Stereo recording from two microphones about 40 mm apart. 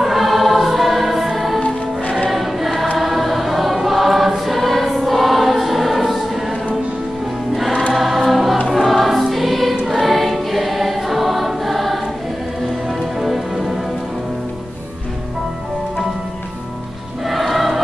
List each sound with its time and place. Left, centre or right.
0.0 s choir: centre
1.6 s music: left
2.2 s choir: centre
7.9 s choir: centre
8.7 s music: centre
9.8 s choir: centre
12.8 s music: centre
17.3 s music: centre